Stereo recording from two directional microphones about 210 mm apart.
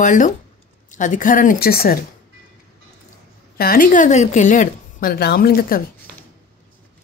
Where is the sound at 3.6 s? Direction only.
45° left (ahead or behind).